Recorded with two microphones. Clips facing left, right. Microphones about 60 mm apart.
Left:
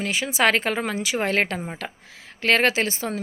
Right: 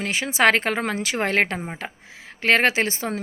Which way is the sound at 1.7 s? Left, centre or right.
Right.